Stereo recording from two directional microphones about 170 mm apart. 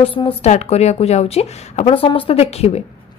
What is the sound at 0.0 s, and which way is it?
A woman's voice, 30° left (ahead or behind).